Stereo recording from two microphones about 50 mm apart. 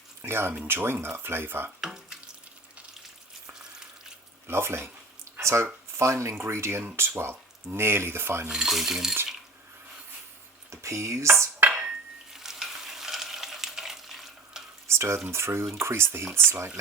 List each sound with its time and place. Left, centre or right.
0.2 s speech: right
1.8 s water tap: centre
4.4 s a sound: right
6.0 s speech: right
6.3 s speech: right
8.4 s coin: centre
10.7 s speech: right
11.8 s stir: centre
14.8 s frying: right
15.3 s speech: right